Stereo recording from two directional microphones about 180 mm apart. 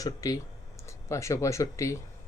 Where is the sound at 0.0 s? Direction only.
20° left (ahead or behind).